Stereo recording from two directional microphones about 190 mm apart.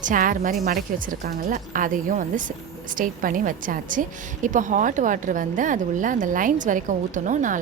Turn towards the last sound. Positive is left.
turn(degrees=-40)  # may be behind; listen again after turning